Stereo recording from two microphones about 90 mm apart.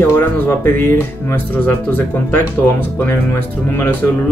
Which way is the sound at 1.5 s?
20° left (ahead or behind).